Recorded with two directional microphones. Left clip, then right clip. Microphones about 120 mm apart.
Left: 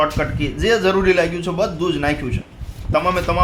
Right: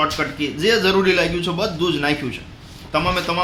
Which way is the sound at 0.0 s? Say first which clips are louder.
Left 1 dB; 20° left (ahead or behind).